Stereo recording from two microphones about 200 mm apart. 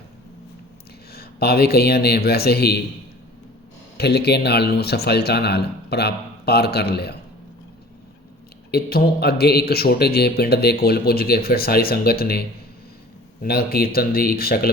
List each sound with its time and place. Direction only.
1.1 s speech: 50° left (ahead or behind)
3.9 s speech: 55° left (ahead or behind)
8.7 s speech: 50° left (ahead or behind)